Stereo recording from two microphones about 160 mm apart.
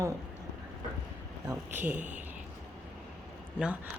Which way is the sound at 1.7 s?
10° right (ahead or behind).